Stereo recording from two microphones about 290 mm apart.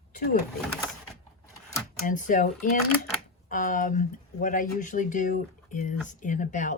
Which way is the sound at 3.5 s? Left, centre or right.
Left.